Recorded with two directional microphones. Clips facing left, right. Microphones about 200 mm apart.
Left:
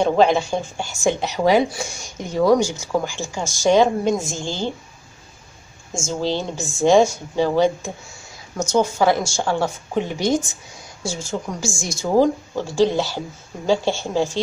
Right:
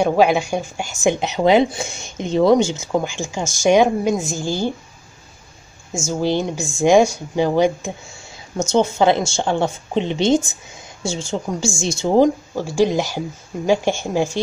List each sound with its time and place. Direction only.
0.0 s speech: 10° right (ahead or behind)
6.0 s speech: 15° right (ahead or behind)
12.5 s speech: 10° right (ahead or behind)